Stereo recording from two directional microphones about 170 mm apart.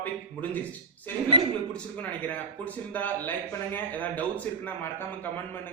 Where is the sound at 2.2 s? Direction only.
10° left (ahead or behind).